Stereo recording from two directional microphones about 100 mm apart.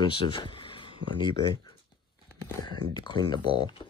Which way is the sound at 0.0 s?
50° left (ahead or behind).